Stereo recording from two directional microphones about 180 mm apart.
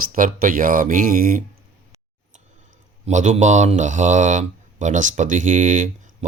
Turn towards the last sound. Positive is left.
turn(degrees=-45)  # may be behind; listen again after turning